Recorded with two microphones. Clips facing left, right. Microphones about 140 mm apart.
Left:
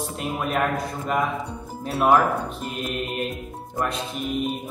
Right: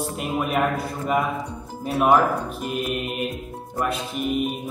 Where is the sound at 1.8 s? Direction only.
5° right (ahead or behind).